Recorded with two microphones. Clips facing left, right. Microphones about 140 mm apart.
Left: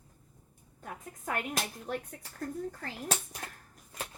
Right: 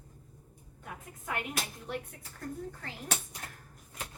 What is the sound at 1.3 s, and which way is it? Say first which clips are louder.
A woman's voice: left 2 dB; 40° left (ahead or behind).